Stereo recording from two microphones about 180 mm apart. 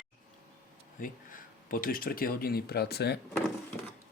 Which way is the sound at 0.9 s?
50° left (ahead or behind).